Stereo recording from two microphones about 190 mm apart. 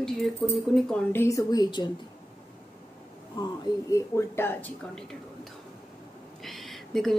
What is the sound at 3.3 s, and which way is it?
A woman's voice, 20° left (ahead or behind).